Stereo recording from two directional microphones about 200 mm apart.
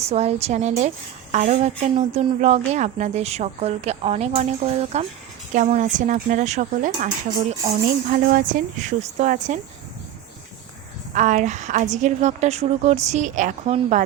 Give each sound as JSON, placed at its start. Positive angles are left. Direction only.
{"t": 0.0, "sound": "a woman's voice", "side_deg": -30}
{"t": 8.1, "sound": "a woman's voice", "side_deg": -45}
{"t": 11.1, "sound": "a woman's voice", "side_deg": -40}